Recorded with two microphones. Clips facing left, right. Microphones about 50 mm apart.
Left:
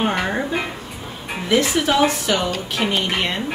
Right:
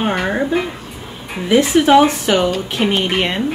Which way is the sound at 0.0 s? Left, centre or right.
Centre.